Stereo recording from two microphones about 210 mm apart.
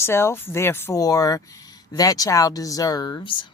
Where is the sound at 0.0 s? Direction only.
10° left (ahead or behind).